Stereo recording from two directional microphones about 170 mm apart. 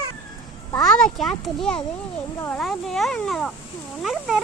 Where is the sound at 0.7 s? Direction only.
5° left (ahead or behind).